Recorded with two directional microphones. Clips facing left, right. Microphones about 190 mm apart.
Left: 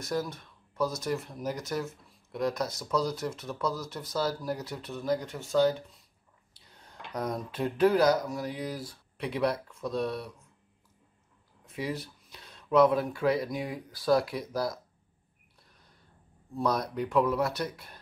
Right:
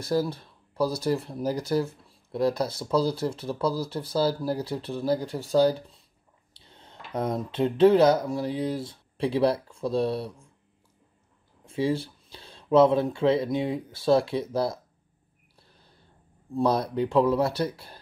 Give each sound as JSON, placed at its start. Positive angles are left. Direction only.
{"t": 0.0, "sound": "speech", "side_deg": -30}
{"t": 6.5, "sound": "drawer open or close", "side_deg": -25}
{"t": 7.1, "sound": "speech", "side_deg": -25}
{"t": 11.6, "sound": "speech", "side_deg": -30}
{"t": 15.6, "sound": "a sound", "side_deg": -30}
{"t": 16.5, "sound": "speech", "side_deg": -30}